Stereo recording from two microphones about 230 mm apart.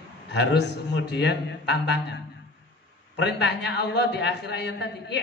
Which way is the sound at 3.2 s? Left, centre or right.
Left.